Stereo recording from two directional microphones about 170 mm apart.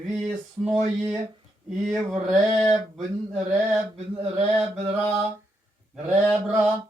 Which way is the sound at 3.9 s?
35° right (ahead or behind).